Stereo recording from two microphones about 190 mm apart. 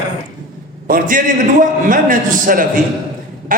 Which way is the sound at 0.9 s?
45° right (ahead or behind).